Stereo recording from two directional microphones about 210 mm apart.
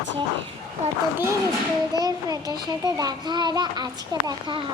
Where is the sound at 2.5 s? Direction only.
20° right (ahead or behind).